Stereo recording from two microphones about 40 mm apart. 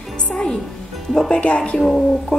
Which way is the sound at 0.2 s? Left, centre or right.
Left.